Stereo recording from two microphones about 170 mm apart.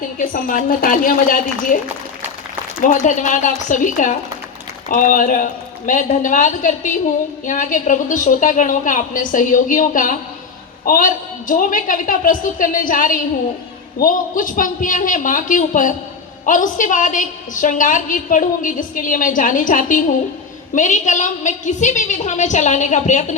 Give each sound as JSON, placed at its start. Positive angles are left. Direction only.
{"t": 0.2, "sound": "a woman's voice", "side_deg": 50}
{"t": 2.8, "sound": "a woman's voice", "side_deg": 50}